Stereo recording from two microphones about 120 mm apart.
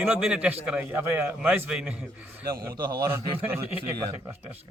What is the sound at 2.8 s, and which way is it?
Speech, 35° right (ahead or behind).